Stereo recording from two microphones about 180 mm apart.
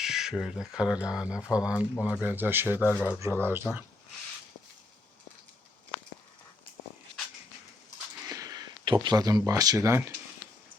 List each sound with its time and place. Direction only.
0.0 s speech: 5° right (ahead or behind)
8.3 s a sound: 20° right (ahead or behind)
9.4 s speech: 20° right (ahead or behind)